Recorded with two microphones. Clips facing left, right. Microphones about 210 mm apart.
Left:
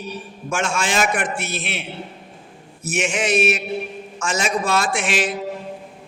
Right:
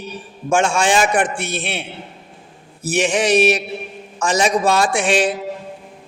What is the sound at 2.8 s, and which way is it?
A man's voice, 35° right (ahead or behind).